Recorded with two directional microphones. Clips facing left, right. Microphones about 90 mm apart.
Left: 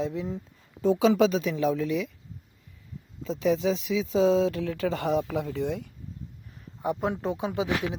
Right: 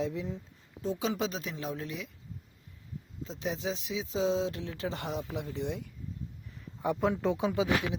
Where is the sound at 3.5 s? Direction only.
65° left (ahead or behind); by 5.8 s 85° left.